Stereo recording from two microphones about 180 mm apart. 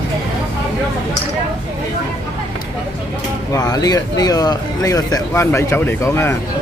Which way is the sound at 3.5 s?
20° left (ahead or behind).